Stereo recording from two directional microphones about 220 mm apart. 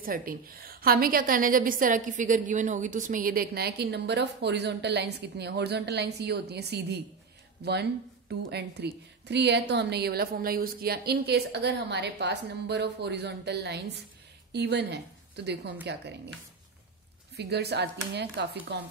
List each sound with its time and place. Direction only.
0.0 s a woman's voice: 40° right (ahead or behind)
17.4 s a woman's voice: 50° right (ahead or behind)